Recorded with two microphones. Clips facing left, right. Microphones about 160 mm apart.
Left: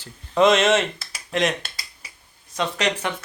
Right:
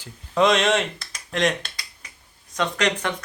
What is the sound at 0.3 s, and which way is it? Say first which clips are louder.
Speech: left 2 dB; centre (ahead or behind).